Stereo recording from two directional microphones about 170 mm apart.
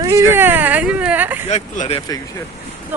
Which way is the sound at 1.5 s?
45° left (ahead or behind).